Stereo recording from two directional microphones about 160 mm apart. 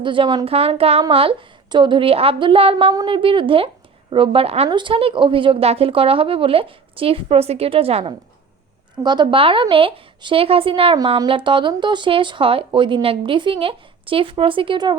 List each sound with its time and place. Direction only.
0.0 s a woman's voice: 30° right (ahead or behind)